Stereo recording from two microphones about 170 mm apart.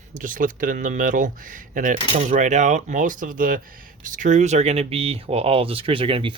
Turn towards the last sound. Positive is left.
turn(degrees=-30)  # may be behind; listen again after turning